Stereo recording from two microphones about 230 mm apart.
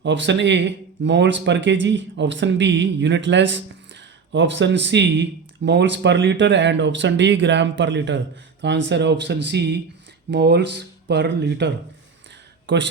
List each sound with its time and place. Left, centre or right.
0.0 s speech: right